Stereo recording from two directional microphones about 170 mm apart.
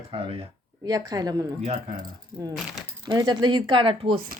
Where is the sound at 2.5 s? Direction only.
Centre (ahead or behind).